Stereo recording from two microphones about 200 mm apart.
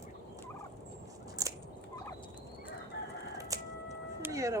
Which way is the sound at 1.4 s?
15° right (ahead or behind).